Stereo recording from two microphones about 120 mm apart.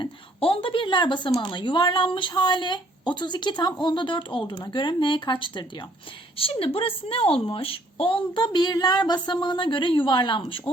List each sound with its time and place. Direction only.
0.0 s a woman's voice: 50° left (ahead or behind)